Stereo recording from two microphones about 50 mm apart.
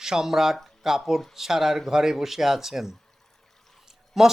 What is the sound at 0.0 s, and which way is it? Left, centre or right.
Speech, centre.